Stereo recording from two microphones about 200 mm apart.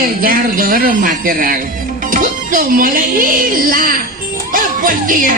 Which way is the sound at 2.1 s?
40° right (ahead or behind).